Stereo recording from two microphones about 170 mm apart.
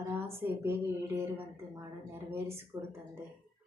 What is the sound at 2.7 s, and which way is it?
Speech, 15° right (ahead or behind).